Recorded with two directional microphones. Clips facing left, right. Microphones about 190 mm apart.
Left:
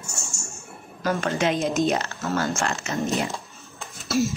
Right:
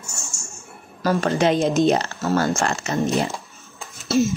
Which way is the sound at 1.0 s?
35° right (ahead or behind).